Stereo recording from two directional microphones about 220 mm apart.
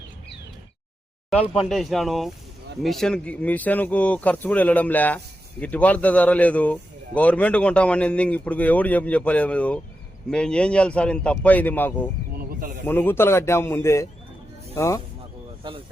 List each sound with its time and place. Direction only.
1.7 s speech: centre (ahead or behind)
12.4 s snake: 40° right (ahead or behind)
12.8 s speech: 10° left (ahead or behind)